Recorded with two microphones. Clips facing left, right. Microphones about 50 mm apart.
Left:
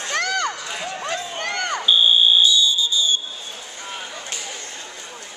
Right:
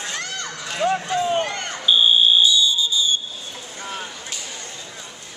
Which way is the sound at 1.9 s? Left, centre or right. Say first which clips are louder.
Right 1 dB; centre.